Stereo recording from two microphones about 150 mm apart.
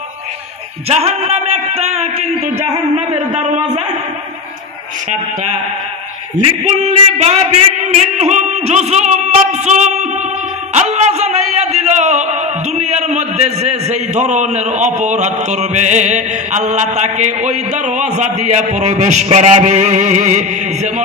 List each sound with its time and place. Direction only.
0.8 s speech: 45° right (ahead or behind)
6.3 s speech: 50° right (ahead or behind)
10.7 s music: 50° right (ahead or behind)